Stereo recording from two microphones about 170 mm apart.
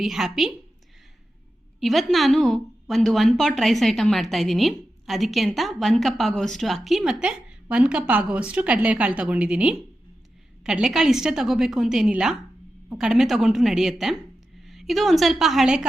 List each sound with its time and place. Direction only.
0.0 s a woman's voice: centre (ahead or behind)
1.8 s a woman's voice: centre (ahead or behind)